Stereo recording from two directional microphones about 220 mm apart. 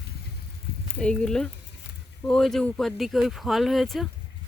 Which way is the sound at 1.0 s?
5° left (ahead or behind).